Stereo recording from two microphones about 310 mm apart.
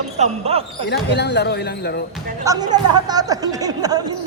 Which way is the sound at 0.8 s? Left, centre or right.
Left.